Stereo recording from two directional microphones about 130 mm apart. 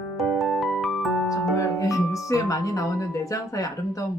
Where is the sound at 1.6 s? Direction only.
25° left (ahead or behind).